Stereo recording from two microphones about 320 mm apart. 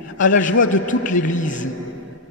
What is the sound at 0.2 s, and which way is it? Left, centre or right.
A man's voice, left.